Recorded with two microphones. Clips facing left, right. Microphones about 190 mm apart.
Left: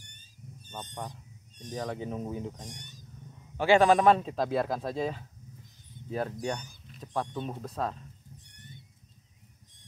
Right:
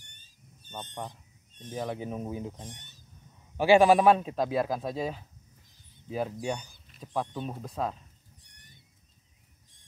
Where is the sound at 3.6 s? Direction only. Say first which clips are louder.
Right 2 dB; 15° right (ahead or behind).